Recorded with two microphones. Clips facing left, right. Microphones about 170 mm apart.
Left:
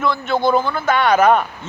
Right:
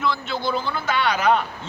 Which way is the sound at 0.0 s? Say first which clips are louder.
Left 7 dB; 50° left (ahead or behind).